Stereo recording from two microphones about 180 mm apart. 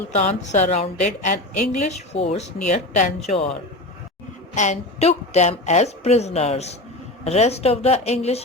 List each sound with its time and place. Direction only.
0.2 s a woman's voice: 40° left (ahead or behind)
4.5 s a woman's voice: 40° left (ahead or behind)